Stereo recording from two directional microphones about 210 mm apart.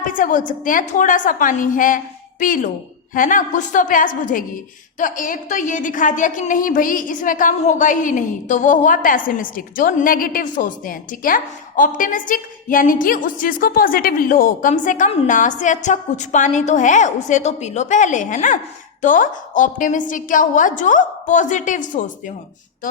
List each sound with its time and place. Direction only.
0.1 s a woman's voice: 40° left (ahead or behind)